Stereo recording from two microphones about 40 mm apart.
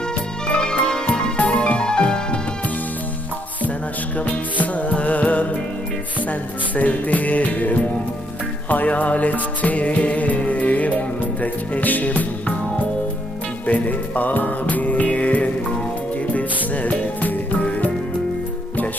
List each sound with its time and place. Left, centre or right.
0.4 s music: left
4.6 s music: left
6.7 s music: left